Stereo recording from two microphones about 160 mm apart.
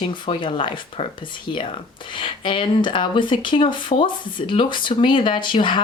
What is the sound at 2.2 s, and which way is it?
Speech, 30° left (ahead or behind).